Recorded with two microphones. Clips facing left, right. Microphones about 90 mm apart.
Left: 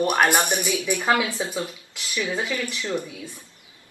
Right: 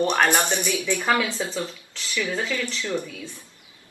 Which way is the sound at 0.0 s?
10° left (ahead or behind).